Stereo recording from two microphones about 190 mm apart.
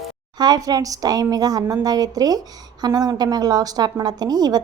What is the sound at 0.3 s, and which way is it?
A woman's voice, 20° right (ahead or behind).